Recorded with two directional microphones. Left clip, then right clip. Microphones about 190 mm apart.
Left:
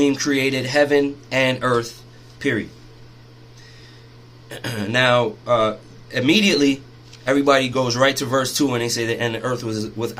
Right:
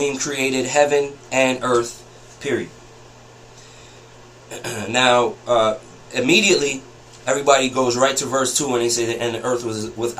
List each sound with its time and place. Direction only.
0.0 s speech: 60° left (ahead or behind)
4.4 s speech: 60° left (ahead or behind)